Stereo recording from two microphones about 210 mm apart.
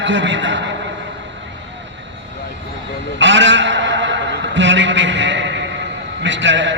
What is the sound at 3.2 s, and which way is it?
Bleat, 60° right (ahead or behind).